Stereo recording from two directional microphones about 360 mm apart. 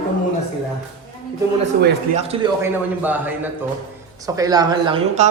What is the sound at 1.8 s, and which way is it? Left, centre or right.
A man's voice, centre.